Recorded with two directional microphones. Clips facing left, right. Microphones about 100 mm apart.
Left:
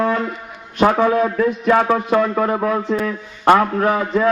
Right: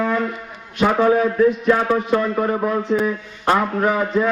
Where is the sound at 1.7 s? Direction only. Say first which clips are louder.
Left 2 dB; 60° left (ahead or behind).